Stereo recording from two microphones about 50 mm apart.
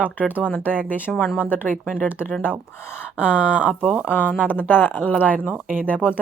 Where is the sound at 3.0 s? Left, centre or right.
Right.